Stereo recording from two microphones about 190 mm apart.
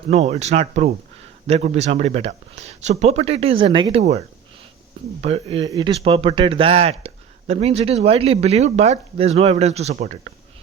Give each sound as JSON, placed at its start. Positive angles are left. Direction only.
{"t": 0.1, "sound": "speech", "side_deg": -35}
{"t": 5.2, "sound": "speech", "side_deg": -30}